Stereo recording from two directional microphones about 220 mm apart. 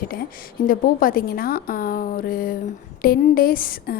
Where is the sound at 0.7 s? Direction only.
40° left (ahead or behind).